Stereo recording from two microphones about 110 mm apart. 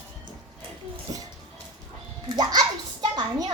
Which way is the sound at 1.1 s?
40° right (ahead or behind).